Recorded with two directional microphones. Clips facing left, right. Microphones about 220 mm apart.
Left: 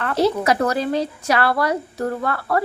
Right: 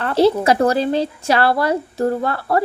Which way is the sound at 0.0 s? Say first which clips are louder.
Right 4 dB; 30° right (ahead or behind).